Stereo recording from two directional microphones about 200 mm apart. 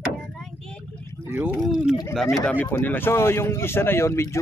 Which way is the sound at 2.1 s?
Centre (ahead or behind).